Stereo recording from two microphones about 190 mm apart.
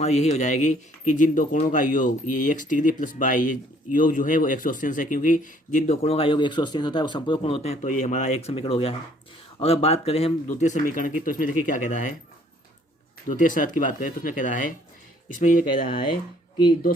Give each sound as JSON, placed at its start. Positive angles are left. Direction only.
{"t": 0.0, "sound": "speech", "side_deg": 35}
{"t": 13.2, "sound": "speech", "side_deg": 45}